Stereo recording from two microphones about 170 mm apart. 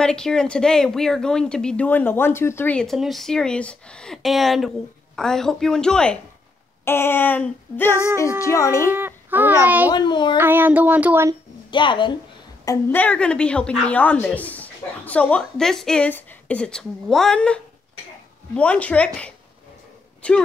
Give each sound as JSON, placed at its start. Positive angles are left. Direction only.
{"t": 0.0, "sound": "a woman's voice", "side_deg": 5}
{"t": 8.9, "sound": "child singing", "side_deg": -10}
{"t": 9.8, "sound": "speech", "side_deg": 25}
{"t": 10.3, "sound": "speech", "side_deg": -10}
{"t": 11.7, "sound": "speech", "side_deg": 30}
{"t": 12.6, "sound": "a woman's voice", "side_deg": 10}